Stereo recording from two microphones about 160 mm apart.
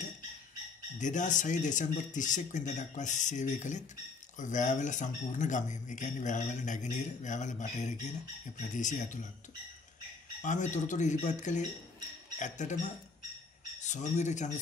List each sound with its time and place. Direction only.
0.9 s speech: 50° left (ahead or behind)
10.4 s speech: 50° left (ahead or behind)